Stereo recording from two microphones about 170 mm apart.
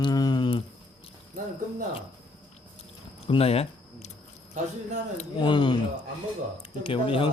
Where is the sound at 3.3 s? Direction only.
35° left (ahead or behind).